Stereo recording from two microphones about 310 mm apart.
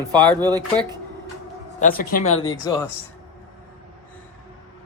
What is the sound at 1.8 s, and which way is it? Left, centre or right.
Speech, left.